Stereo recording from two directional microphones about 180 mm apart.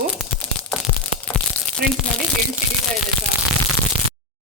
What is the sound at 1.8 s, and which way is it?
Speech, 55° right (ahead or behind).